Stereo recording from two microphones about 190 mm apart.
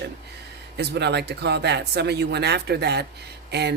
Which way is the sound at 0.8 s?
60° right (ahead or behind).